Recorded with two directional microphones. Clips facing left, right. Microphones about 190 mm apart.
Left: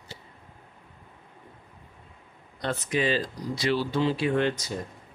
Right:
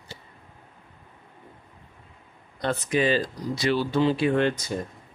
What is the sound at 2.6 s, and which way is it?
Speech, 50° right (ahead or behind).